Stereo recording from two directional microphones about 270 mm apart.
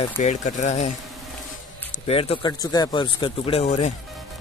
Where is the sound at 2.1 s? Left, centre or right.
Left.